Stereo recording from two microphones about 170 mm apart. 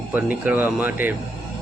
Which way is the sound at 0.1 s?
10° right (ahead or behind).